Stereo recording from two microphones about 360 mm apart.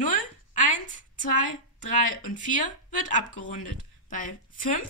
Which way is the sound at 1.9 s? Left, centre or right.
Left.